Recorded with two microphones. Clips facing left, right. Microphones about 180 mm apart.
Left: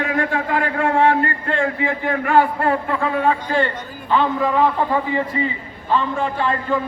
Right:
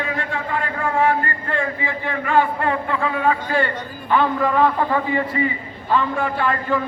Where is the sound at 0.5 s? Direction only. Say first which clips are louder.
Left 3 dB; 80° left.